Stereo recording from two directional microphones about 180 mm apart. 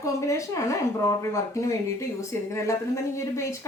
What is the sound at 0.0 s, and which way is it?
A woman's voice, 15° left (ahead or behind).